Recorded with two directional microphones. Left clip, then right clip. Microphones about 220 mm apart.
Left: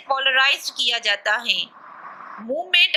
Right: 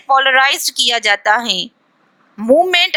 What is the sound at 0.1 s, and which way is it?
A woman's voice, 45° right (ahead or behind).